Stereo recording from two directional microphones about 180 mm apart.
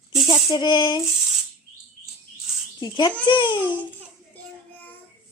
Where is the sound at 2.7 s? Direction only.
25° left (ahead or behind).